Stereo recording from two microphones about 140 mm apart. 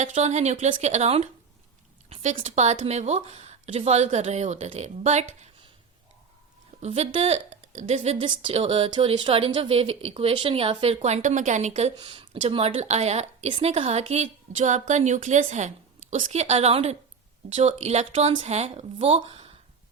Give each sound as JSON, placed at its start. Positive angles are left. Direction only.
{"t": 0.0, "sound": "a woman's voice", "side_deg": -55}
{"t": 2.4, "sound": "a woman's voice", "side_deg": -55}
{"t": 6.8, "sound": "a woman's voice", "side_deg": -50}
{"t": 8.2, "sound": "a woman's voice", "side_deg": -40}
{"t": 11.9, "sound": "a woman's voice", "side_deg": -35}